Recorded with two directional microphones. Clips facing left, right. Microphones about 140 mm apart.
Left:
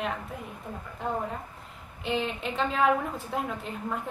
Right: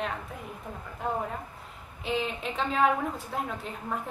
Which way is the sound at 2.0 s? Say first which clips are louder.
Left 1 dB; centre (ahead or behind).